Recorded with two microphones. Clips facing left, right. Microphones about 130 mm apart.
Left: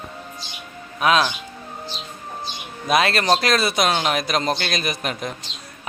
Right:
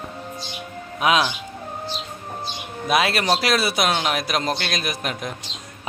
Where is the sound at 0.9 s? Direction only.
15° right (ahead or behind).